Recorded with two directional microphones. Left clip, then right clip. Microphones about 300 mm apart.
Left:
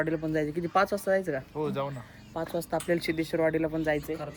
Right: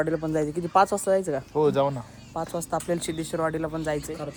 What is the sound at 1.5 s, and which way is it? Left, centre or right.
Speech, right.